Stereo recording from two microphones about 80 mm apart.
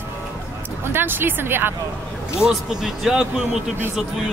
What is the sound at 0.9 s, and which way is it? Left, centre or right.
Speech, right.